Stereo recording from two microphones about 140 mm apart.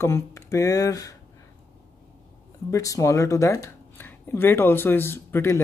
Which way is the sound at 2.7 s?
25° left (ahead or behind).